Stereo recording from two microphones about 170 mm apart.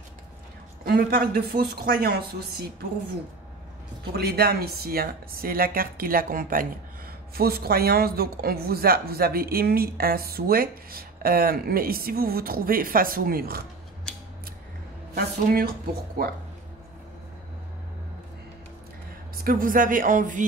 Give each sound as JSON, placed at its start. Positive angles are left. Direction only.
{"t": 0.8, "sound": "speech", "side_deg": -65}
{"t": 4.1, "sound": "speech", "side_deg": -65}
{"t": 7.3, "sound": "speech", "side_deg": -65}
{"t": 14.1, "sound": "scissors", "side_deg": 5}
{"t": 15.1, "sound": "speech", "side_deg": -60}
{"t": 19.4, "sound": "speech", "side_deg": -55}